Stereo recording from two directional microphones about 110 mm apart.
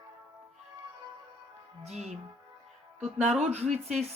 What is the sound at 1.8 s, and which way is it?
Speech, 85° right.